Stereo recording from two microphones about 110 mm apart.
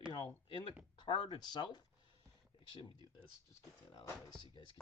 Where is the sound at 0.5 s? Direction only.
45° left (ahead or behind).